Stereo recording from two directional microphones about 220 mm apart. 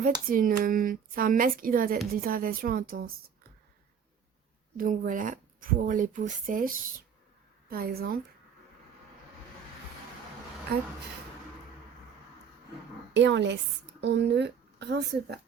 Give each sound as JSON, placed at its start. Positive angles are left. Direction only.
{"t": 0.3, "sound": "speech", "side_deg": -40}
{"t": 4.8, "sound": "speech", "side_deg": -35}
{"t": 10.7, "sound": "speech", "side_deg": -45}
{"t": 13.1, "sound": "speech", "side_deg": -55}